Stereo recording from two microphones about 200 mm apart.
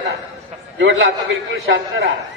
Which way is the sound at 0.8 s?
65° right (ahead or behind).